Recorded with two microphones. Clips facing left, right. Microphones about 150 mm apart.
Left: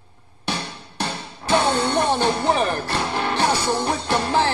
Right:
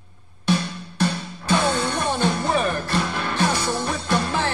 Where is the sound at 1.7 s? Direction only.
20° left (ahead or behind).